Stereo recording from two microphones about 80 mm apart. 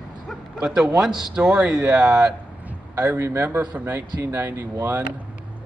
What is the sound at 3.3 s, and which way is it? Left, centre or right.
A man's voice, centre.